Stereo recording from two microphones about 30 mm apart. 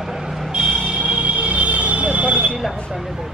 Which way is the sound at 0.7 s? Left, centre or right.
Right.